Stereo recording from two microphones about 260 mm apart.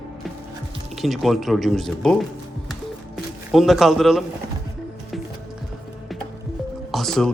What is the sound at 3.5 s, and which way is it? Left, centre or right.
Speech, centre.